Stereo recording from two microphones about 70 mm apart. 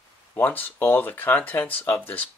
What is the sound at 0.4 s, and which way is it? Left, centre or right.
Speech, left.